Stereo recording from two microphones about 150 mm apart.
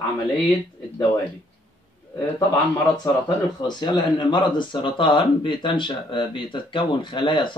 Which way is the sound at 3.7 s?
30° left (ahead or behind).